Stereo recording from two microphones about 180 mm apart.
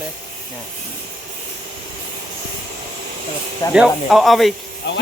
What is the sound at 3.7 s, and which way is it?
Speech, 5° right (ahead or behind).